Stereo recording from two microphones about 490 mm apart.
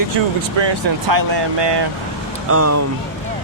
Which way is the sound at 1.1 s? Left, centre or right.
Right.